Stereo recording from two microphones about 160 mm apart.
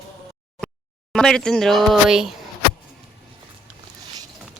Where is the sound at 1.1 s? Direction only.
5° left (ahead or behind).